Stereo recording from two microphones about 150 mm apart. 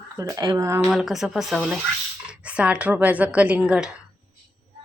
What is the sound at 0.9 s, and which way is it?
Speech, centre (ahead or behind).